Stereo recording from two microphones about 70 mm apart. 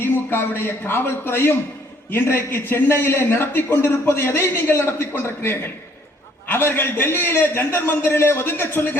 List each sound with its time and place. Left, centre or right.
0.0 s a man's voice: left